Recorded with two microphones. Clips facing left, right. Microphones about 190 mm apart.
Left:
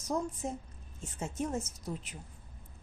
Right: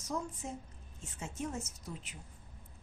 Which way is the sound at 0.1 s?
40° left (ahead or behind).